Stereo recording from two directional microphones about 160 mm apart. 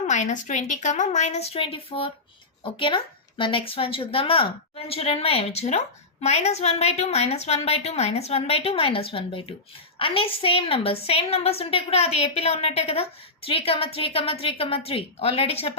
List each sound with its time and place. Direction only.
0.1 s a woman's voice: 50° left (ahead or behind)